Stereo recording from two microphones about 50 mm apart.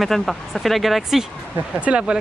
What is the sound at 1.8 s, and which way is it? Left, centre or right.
Speech, right.